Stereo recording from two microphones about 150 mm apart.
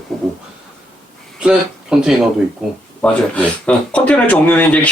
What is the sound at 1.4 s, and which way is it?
Speech, 5° right (ahead or behind).